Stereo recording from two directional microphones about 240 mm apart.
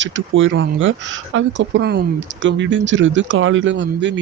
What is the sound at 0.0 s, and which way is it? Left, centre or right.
Speech, right.